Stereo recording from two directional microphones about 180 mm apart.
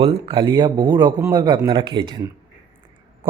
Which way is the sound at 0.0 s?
30° right (ahead or behind).